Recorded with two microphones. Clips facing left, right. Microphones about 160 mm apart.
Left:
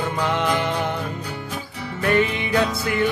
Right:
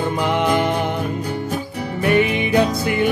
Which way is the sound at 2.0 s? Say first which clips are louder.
Right 3 dB; 15° right (ahead or behind).